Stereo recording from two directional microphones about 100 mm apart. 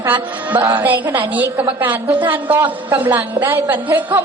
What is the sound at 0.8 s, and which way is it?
A woman's voice, 15° right (ahead or behind).